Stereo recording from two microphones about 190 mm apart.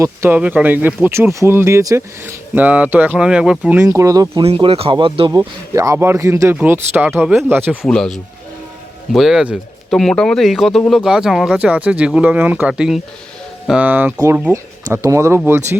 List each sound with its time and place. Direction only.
0.0 s speech: 10° right (ahead or behind)
4.4 s speech: 30° right (ahead or behind); by 7.9 s 10° right (ahead or behind)
7.9 s speech: 5° left (ahead or behind)